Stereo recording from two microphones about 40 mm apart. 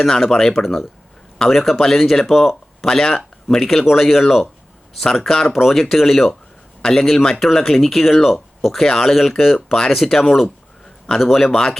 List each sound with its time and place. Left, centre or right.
0.0 s speech: centre
2.2 s speech: centre
2.8 s speech: centre
6.8 s speech: centre
8.7 s speech: centre
9.7 s speech: centre
10.0 s speech: centre